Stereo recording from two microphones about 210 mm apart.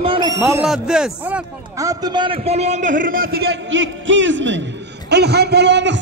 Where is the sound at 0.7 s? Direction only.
5° right (ahead or behind).